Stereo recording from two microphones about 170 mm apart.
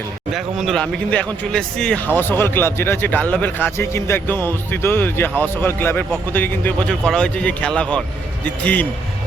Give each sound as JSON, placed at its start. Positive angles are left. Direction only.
{"t": 0.3, "sound": "speech", "side_deg": 0}